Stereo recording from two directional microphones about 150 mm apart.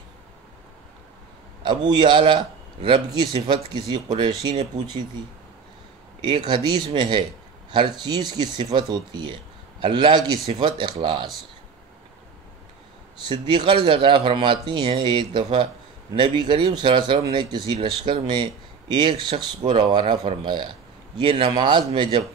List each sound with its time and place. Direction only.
1.6 s a man's voice: 30° right (ahead or behind)
6.2 s speech: 30° right (ahead or behind)
13.3 s speech: 30° right (ahead or behind)